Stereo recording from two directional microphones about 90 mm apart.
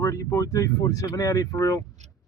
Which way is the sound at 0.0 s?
35° left (ahead or behind).